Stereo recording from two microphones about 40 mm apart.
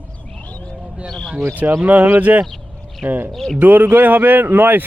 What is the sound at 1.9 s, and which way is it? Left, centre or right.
Speech, right.